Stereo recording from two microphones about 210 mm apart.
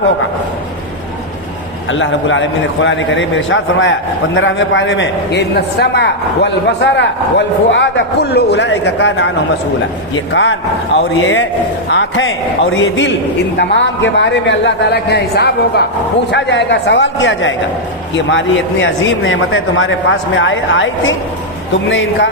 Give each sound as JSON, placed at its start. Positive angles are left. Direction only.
{"t": 1.9, "sound": "a man's voice", "side_deg": 65}
{"t": 10.3, "sound": "speech", "side_deg": 60}
{"t": 11.9, "sound": "a man's voice", "side_deg": 60}